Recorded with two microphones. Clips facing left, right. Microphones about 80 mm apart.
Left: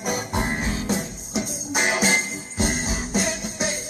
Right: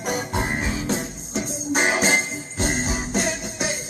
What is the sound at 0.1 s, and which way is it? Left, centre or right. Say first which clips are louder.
Music: right 1 dB; right.